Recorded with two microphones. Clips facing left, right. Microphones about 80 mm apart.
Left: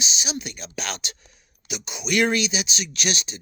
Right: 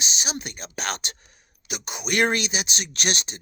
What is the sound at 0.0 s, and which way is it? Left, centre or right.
Speech, right.